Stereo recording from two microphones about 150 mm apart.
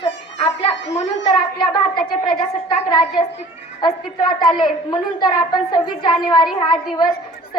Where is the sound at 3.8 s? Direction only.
30° left (ahead or behind).